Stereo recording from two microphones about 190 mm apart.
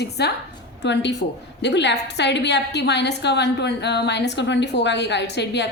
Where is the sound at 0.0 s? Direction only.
60° left (ahead or behind).